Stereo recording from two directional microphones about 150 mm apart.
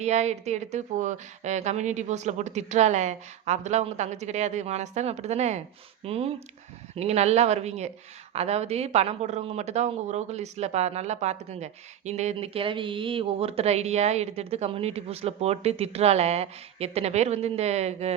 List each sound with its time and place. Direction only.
0.0 s speech: 50° right (ahead or behind)